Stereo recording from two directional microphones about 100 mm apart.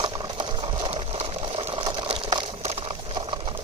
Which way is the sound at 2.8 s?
60° right (ahead or behind).